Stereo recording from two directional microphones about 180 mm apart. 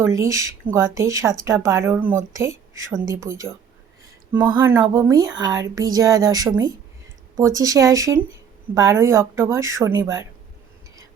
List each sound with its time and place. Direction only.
0.0 s speech: 15° right (ahead or behind)